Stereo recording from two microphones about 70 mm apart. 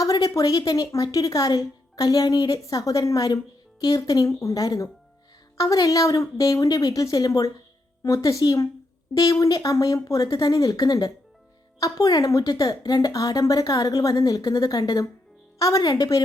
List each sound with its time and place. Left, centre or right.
0.0 s a woman's voice: left
15.5 s a woman's voice: left
15.8 s a woman's voice: left